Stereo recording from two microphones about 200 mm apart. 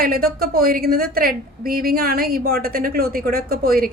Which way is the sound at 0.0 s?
50° right (ahead or behind).